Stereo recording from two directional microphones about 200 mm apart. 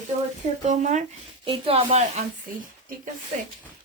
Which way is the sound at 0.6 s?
35° right (ahead or behind).